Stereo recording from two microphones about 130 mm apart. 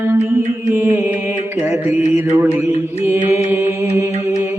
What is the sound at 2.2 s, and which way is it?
Mantra, 20° right (ahead or behind).